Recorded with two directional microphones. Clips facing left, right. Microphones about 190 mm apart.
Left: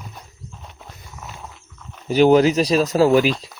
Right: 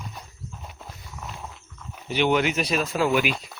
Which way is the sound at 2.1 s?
35° left (ahead or behind).